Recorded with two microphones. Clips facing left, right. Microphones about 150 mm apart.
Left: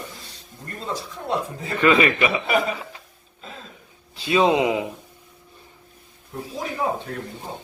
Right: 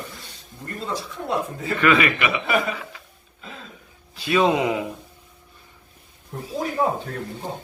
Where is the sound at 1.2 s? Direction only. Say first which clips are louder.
Right 1 dB; 25° left (ahead or behind).